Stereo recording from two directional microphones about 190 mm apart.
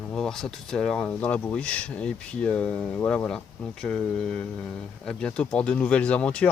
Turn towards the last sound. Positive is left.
turn(degrees=5)  # may be behind; listen again after turning